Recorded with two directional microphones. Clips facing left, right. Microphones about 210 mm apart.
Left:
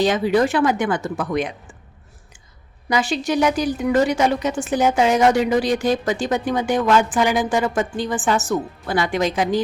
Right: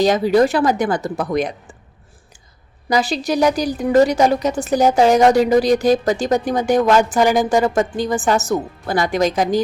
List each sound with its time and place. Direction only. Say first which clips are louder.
0.0 s a woman's voice: right 3 dB; 40° right (ahead or behind)
2.9 s a woman's voice: right 2 dB; 35° right (ahead or behind)